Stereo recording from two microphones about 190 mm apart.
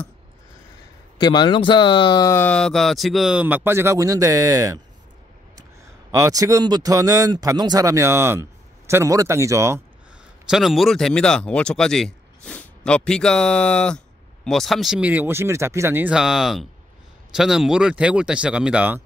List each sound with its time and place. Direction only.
1.1 s speech: 25° left (ahead or behind); by 4.7 s 15° right (ahead or behind)
6.1 s speech: 15° right (ahead or behind)
10.5 s speech: centre (ahead or behind)